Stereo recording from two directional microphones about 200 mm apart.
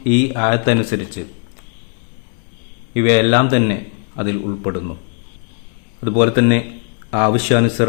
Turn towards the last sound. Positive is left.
turn(degrees=-30)  # may be behind; listen again after turning